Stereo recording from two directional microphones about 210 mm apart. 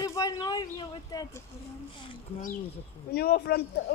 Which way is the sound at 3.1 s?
50° left (ahead or behind).